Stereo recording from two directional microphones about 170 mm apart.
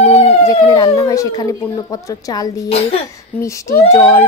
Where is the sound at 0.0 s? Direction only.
40° left (ahead or behind).